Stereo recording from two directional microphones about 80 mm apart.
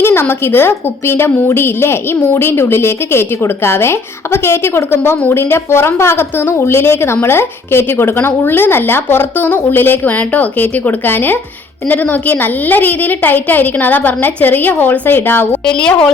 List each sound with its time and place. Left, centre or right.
0.0 s a woman's voice: left
15.6 s a woman's voice: centre